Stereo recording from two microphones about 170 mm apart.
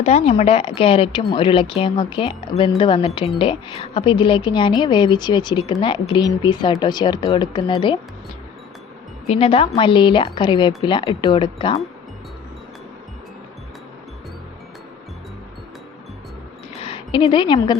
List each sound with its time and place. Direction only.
0.0 s a woman's voice: 40° left (ahead or behind)
9.2 s a woman's voice: 35° left (ahead or behind)
16.7 s a woman's voice: 35° left (ahead or behind)